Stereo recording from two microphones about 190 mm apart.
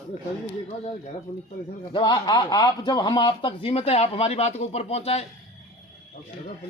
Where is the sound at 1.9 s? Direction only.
25° left (ahead or behind).